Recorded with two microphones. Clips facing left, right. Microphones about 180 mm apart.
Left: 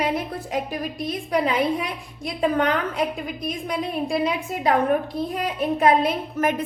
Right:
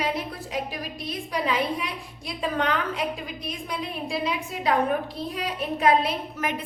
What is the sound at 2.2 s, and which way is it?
Speech, 50° left (ahead or behind).